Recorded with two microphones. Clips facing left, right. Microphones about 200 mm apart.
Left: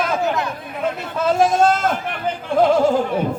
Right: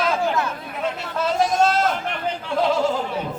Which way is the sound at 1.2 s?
50° left (ahead or behind).